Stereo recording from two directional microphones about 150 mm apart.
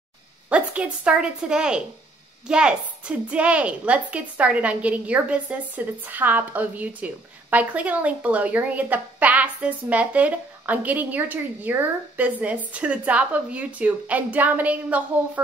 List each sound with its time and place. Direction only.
0.5 s a woman's voice: 10° right (ahead or behind)